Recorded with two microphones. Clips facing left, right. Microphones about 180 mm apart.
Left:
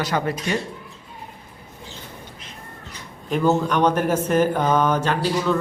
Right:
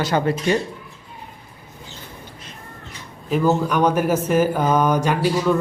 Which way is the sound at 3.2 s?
5° right (ahead or behind).